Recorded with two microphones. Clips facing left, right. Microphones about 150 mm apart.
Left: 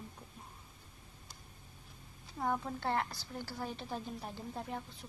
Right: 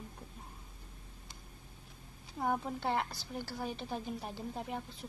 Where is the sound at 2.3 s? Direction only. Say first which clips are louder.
Right 1 dB; 15° right (ahead or behind).